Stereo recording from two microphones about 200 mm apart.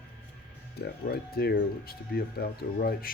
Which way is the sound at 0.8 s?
55° left (ahead or behind).